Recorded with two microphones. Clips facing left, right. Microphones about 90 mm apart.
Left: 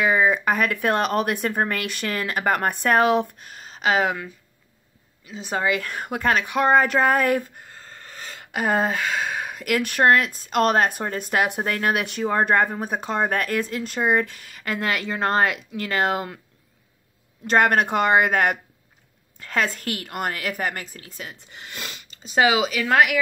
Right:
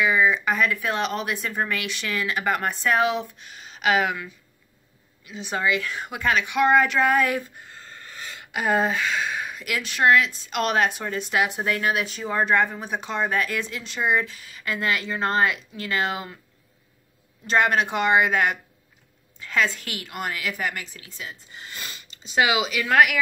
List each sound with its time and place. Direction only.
0.0 s a woman's voice: 50° left (ahead or behind)
17.5 s speech: 50° left (ahead or behind); by 22.0 s 70° left (ahead or behind)
22.0 s speech: 45° left (ahead or behind)